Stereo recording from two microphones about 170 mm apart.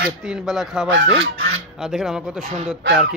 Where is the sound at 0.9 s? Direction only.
90° right.